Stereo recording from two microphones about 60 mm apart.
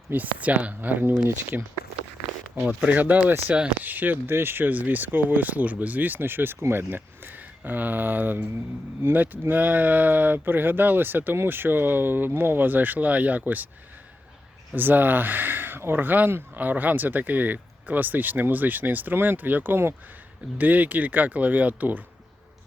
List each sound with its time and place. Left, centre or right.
0.1 s speech: right
14.8 s speech: right